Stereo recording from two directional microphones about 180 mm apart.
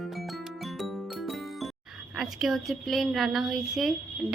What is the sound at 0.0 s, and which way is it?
Music, centre (ahead or behind).